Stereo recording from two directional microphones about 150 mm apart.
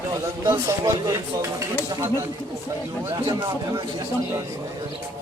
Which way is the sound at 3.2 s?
30° right (ahead or behind).